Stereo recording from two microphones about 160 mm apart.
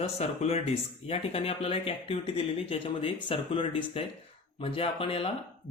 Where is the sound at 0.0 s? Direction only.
40° left (ahead or behind).